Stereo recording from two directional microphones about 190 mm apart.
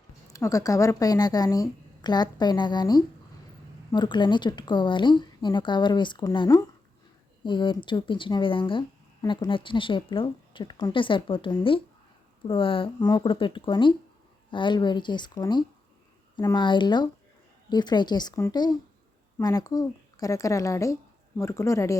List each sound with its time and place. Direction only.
0.3 s speech: 15° left (ahead or behind)